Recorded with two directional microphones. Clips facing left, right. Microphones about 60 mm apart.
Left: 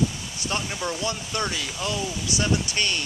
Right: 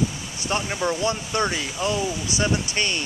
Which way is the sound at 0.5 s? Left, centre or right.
Centre.